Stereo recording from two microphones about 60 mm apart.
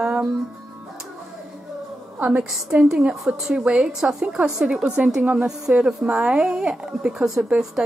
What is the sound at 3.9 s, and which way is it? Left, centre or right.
Speech, centre.